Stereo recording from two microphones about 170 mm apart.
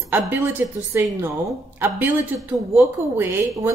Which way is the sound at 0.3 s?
10° right (ahead or behind).